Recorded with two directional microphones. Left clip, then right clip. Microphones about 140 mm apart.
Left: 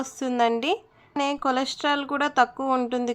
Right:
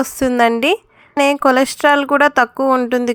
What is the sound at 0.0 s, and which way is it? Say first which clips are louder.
A woman's voice: right 10 dB; 50° right (ahead or behind).